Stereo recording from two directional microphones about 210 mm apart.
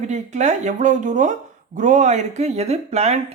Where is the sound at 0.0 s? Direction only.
35° right (ahead or behind).